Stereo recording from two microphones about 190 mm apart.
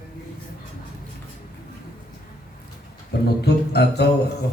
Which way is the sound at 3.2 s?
60° left (ahead or behind).